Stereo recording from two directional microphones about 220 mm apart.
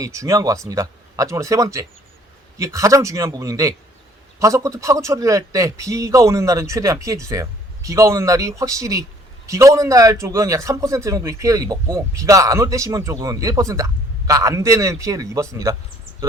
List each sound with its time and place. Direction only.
0.0 s a man's voice: 15° right (ahead or behind)